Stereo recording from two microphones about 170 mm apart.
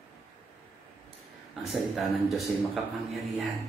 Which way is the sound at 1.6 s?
Centre (ahead or behind).